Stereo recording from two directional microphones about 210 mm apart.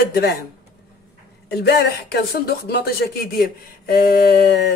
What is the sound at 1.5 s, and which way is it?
Speech, 50° left (ahead or behind).